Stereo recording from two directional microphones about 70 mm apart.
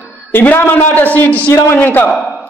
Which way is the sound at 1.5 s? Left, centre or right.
Left.